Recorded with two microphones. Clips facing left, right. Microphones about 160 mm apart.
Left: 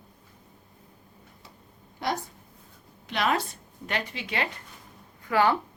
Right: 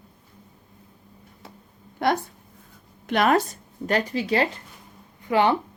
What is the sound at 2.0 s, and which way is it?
Speech, 60° right (ahead or behind).